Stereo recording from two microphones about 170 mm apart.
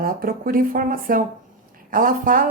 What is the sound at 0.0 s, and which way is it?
A woman's voice, 60° right (ahead or behind).